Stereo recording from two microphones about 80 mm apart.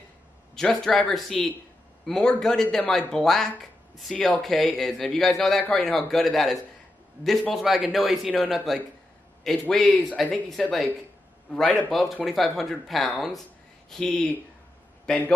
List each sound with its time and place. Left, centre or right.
0.6 s a man's voice: centre
9.8 s speech: centre
10.6 s a man's voice: centre